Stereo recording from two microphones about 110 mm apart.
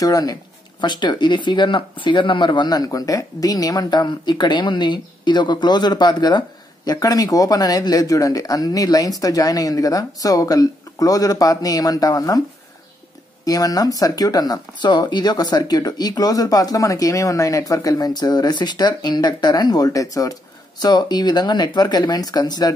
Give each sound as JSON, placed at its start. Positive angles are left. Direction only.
{"t": 0.0, "sound": "speech", "side_deg": 35}
{"t": 13.5, "sound": "speech", "side_deg": 35}